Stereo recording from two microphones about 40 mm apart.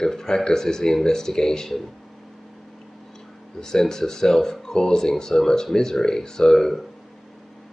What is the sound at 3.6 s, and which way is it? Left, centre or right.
Speech, centre.